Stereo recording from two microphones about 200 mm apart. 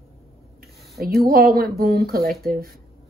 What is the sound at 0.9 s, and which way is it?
Speech, 50° right (ahead or behind).